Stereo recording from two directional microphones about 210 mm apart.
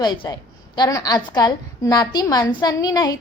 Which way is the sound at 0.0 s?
20° left (ahead or behind).